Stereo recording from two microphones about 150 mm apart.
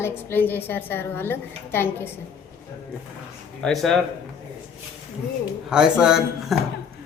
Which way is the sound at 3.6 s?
Centre (ahead or behind).